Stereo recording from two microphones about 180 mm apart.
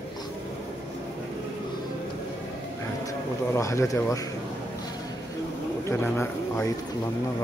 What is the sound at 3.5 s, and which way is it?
Speech, 15° left (ahead or behind).